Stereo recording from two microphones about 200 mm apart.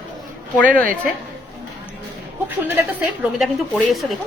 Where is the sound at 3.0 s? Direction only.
Centre (ahead or behind).